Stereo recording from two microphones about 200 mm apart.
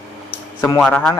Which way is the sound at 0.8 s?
5° left (ahead or behind).